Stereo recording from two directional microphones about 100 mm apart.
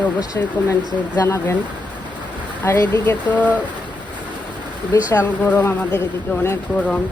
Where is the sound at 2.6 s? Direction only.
25° left (ahead or behind).